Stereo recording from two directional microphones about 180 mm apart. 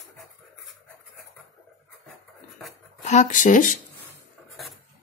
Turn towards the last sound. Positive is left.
turn(degrees=45)  # may be behind; listen again after turning